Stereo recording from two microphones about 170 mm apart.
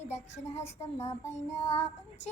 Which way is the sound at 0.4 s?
40° left (ahead or behind).